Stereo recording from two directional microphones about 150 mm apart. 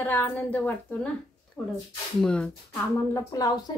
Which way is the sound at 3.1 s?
20° left (ahead or behind).